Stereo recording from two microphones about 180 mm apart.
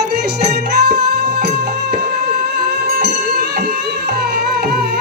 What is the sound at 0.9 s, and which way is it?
Music, 65° right (ahead or behind).